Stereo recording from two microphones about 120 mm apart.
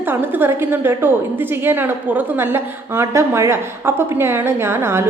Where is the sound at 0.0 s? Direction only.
15° right (ahead or behind).